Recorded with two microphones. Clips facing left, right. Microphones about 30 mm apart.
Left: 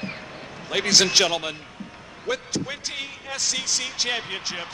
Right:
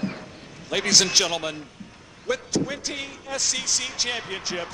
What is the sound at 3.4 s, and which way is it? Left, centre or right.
Speech, centre.